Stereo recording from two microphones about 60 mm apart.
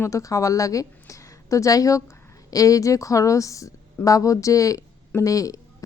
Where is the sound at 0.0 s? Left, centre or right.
Left.